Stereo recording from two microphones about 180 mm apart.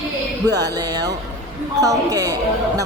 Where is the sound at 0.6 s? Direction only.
20° right (ahead or behind).